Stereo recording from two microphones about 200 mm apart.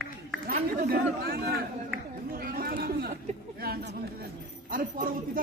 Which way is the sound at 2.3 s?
45° right (ahead or behind).